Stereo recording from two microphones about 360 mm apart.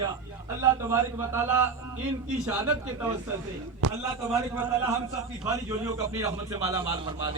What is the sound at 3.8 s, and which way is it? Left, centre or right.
Speech, right.